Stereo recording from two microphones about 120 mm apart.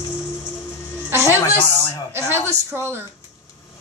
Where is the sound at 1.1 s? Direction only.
25° right (ahead or behind).